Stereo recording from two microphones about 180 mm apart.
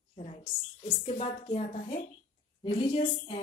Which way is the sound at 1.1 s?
35° left (ahead or behind).